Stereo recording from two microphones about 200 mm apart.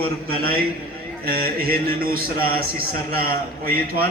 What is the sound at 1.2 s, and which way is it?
Speech, 50° right (ahead or behind).